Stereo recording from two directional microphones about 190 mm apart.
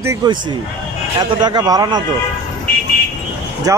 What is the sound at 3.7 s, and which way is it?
Speech, 15° right (ahead or behind).